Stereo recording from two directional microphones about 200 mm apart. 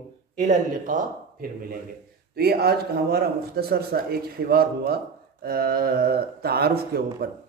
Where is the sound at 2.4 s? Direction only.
50° right (ahead or behind).